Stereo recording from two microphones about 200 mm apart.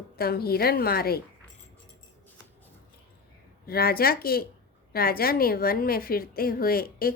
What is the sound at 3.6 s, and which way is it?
A woman's voice, 50° left (ahead or behind).